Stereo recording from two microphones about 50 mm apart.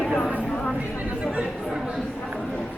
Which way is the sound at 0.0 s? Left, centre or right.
Centre.